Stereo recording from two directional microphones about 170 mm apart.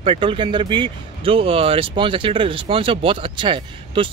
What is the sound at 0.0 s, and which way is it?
Speech, 30° right (ahead or behind).